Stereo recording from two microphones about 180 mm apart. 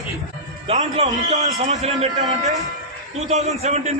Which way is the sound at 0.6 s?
35° right (ahead or behind).